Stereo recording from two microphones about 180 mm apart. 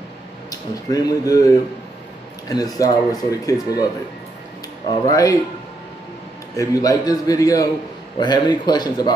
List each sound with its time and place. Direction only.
0.5 s speech: 20° left (ahead or behind)
2.5 s a man's voice: 20° left (ahead or behind)
5.1 s a man's voice: 20° left (ahead or behind)
6.5 s a man's voice: 20° left (ahead or behind)